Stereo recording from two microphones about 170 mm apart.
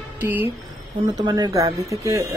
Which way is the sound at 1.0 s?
20° right (ahead or behind).